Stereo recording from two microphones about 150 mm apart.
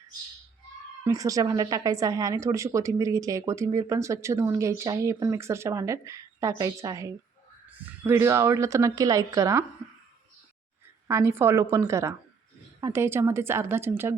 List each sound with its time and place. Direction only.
1.0 s a woman's voice: 20° right (ahead or behind)
11.1 s a woman's voice: 15° right (ahead or behind)